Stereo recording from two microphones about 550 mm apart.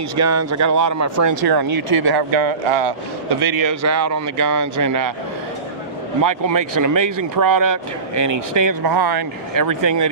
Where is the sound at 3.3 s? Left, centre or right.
Right.